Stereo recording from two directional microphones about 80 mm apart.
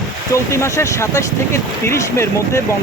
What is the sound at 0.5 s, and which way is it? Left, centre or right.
Speech, left.